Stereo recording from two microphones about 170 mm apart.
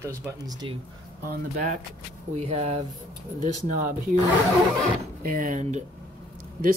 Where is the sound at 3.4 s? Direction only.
20° left (ahead or behind).